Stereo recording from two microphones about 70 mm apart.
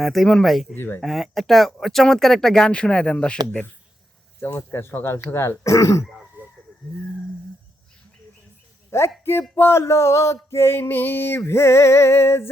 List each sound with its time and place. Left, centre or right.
0.0 s speech: centre
0.8 s music: left
1.0 s speech: centre
4.4 s music: left
5.3 s a sound: left
8.9 s speech: left
9.6 s a sound: left
10.6 s music: left